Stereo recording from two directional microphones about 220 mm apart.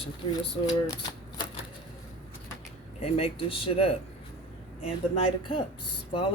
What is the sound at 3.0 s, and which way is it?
Speech, 25° left (ahead or behind).